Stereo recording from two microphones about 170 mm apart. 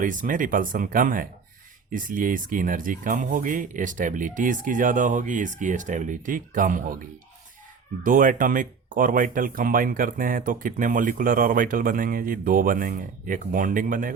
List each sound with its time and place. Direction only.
0.0 s speech: 50° right (ahead or behind)
8.0 s speech: 50° right (ahead or behind)